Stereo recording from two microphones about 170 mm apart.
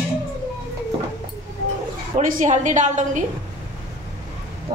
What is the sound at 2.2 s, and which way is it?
A woman's voice, 50° right (ahead or behind).